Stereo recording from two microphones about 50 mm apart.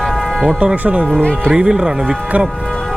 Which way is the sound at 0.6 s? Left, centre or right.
Right.